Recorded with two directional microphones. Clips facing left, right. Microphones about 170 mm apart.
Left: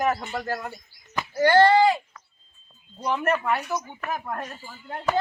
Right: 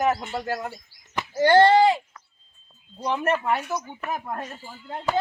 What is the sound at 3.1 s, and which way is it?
Speech, 20° right (ahead or behind).